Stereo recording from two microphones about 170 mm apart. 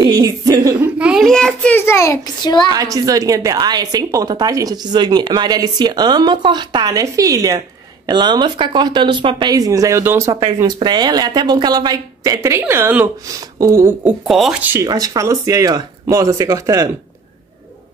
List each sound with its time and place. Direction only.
0.0 s speech: 20° right (ahead or behind)
0.7 s a child's voice: 10° right (ahead or behind); by 2.7 s 25° left (ahead or behind)
2.7 s speech: 20° right (ahead or behind)
14.0 s speech: centre (ahead or behind); by 16.9 s 20° right (ahead or behind)